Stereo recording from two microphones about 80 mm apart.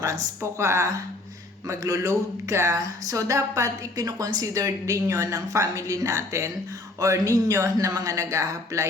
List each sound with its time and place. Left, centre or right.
0.6 s speech: right